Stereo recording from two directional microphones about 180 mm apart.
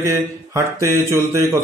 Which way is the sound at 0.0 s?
15° right (ahead or behind).